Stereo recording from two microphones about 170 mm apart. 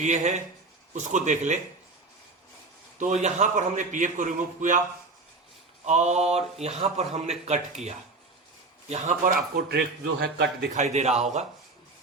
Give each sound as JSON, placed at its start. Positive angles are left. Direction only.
{"t": 0.0, "sound": "a man's voice", "side_deg": -45}
{"t": 3.0, "sound": "a man's voice", "side_deg": -45}
{"t": 5.8, "sound": "a man's voice", "side_deg": -45}
{"t": 9.3, "sound": "a man's voice", "side_deg": -70}
{"t": 10.8, "sound": "speech", "side_deg": -40}